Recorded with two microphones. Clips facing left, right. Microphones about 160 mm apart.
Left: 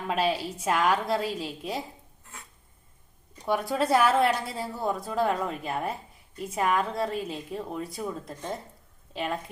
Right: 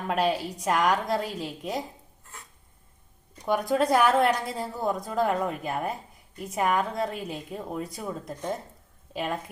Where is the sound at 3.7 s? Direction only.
5° left (ahead or behind).